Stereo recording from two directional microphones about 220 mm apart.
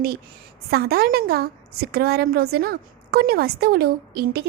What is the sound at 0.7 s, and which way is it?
A woman's voice, 45° right (ahead or behind).